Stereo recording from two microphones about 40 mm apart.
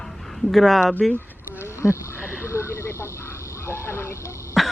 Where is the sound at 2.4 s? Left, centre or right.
Left.